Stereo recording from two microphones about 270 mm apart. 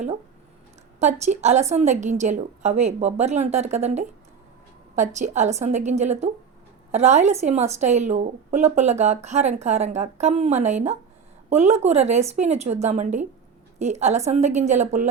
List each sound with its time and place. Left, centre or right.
0.9 s a woman's voice: right